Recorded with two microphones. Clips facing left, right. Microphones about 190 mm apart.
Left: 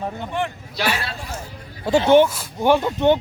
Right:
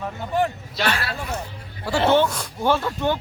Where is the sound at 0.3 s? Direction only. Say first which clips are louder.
Right 4 dB; 40° right (ahead or behind).